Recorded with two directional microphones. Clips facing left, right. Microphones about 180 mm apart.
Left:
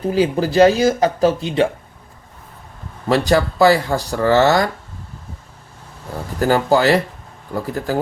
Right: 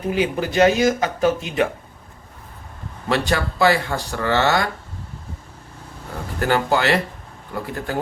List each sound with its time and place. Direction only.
0.0 s speech: 35° left (ahead or behind)
3.1 s speech: 40° left (ahead or behind)
6.4 s speech: 40° left (ahead or behind)